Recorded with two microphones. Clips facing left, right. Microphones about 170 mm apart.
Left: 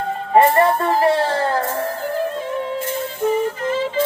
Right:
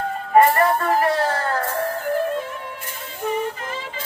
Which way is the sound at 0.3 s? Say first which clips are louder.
Left 2 dB; 25° left (ahead or behind).